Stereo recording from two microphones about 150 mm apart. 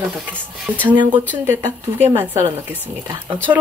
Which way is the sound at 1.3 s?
15° right (ahead or behind).